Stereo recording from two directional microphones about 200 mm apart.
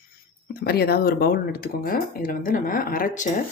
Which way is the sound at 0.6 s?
50° left (ahead or behind).